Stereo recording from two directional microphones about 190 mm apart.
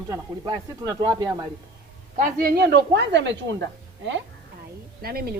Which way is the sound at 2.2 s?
50° right (ahead or behind).